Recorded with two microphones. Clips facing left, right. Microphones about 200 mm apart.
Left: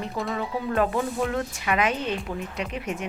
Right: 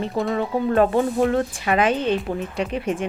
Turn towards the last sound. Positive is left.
turn(degrees=-30)  # may be behind; listen again after turning